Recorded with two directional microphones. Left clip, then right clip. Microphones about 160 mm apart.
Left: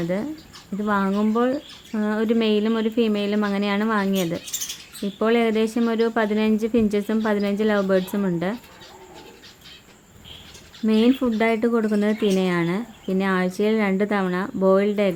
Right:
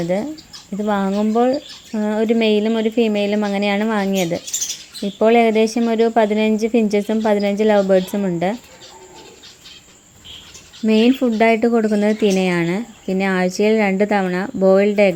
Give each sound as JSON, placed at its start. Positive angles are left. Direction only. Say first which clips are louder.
{"t": 0.9, "sound": "speech", "louder": "right 3 dB", "side_deg": -10}
{"t": 1.1, "sound": "speech", "louder": "right 5 dB", "side_deg": 0}
{"t": 10.8, "sound": "speech", "louder": "right 5 dB", "side_deg": -20}